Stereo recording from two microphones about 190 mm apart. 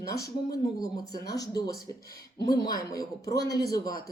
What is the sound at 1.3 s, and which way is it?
A man's voice, 20° left (ahead or behind).